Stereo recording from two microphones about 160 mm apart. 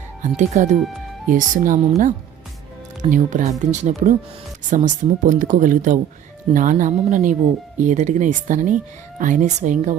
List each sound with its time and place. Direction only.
0.2 s speech: 50° right (ahead or behind)
3.0 s speech: 50° right (ahead or behind)